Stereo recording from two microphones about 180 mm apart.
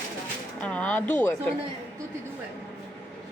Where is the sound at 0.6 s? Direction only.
10° left (ahead or behind).